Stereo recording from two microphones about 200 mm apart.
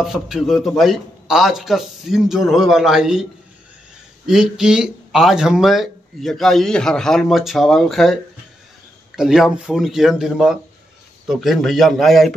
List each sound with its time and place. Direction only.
0.0 s speech: centre (ahead or behind)
4.3 s speech: 5° right (ahead or behind)